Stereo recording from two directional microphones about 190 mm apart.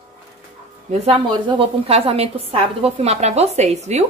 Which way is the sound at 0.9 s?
35° right (ahead or behind).